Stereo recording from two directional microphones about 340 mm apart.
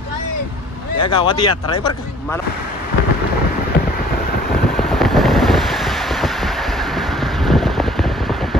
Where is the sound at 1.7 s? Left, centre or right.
Centre.